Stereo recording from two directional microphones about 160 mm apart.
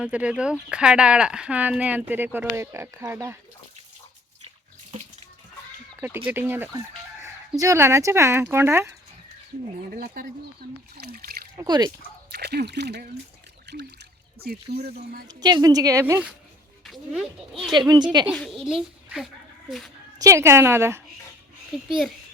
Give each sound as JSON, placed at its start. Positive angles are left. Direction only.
{"t": 0.0, "sound": "speech", "side_deg": -5}
{"t": 6.0, "sound": "speech", "side_deg": -15}
{"t": 9.9, "sound": "speech", "side_deg": -70}
{"t": 11.5, "sound": "a woman's voice", "side_deg": -25}
{"t": 12.3, "sound": "speech", "side_deg": -90}
{"t": 13.7, "sound": "a sound", "side_deg": -90}
{"t": 14.4, "sound": "speech", "side_deg": -75}
{"t": 15.3, "sound": "a woman's voice", "side_deg": -25}
{"t": 16.8, "sound": "speech", "side_deg": 0}
{"t": 17.7, "sound": "a woman's voice", "side_deg": -25}
{"t": 18.3, "sound": "speech", "side_deg": 5}
{"t": 20.1, "sound": "speech", "side_deg": -20}
{"t": 21.8, "sound": "speech", "side_deg": -5}